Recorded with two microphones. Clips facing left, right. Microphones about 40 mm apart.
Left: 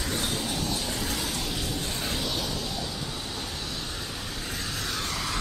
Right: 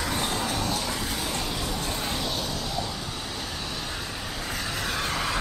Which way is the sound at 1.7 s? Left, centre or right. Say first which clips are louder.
Right 2 dB; right.